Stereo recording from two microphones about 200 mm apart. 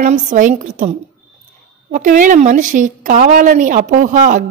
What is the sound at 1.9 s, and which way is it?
A woman's voice, 40° right (ahead or behind).